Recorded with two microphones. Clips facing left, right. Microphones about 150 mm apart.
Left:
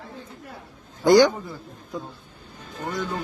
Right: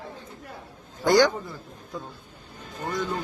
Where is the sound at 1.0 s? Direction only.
15° left (ahead or behind).